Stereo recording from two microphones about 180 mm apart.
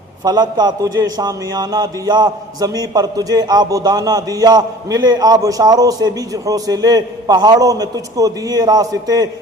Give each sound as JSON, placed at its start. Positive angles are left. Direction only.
{"t": 0.3, "sound": "a man's voice", "side_deg": -20}